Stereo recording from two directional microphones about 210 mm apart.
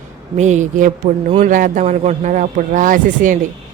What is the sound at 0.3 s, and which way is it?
A man's voice, 35° right (ahead or behind).